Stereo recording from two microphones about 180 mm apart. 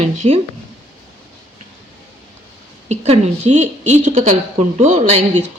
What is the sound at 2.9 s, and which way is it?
Speech, 40° right (ahead or behind).